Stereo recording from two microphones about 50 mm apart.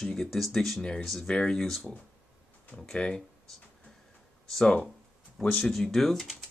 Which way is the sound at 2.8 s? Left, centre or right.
Centre.